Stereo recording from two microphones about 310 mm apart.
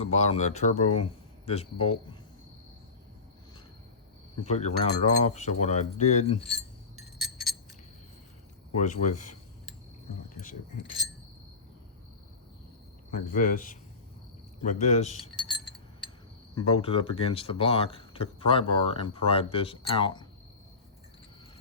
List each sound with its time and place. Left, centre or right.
0.0 s speech: centre
4.4 s speech: left
8.7 s speech: left
10.7 s speech: left
13.1 s speech: left
16.6 s speech: centre